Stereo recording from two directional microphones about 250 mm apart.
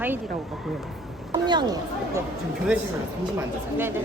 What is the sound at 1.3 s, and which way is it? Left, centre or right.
Speech, centre.